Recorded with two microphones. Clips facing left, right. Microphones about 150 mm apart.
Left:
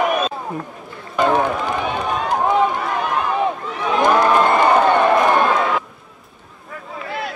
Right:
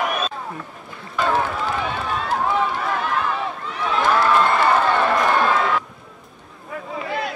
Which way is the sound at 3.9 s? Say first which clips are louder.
Left 3 dB; 15° left (ahead or behind).